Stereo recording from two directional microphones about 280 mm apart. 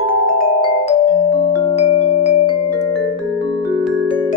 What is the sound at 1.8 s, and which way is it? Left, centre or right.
Music, left.